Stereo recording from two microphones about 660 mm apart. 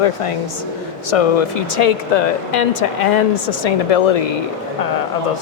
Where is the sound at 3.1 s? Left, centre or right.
Left.